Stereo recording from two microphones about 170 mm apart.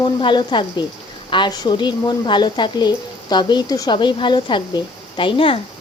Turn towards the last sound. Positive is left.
turn(degrees=30)  # may be behind; listen again after turning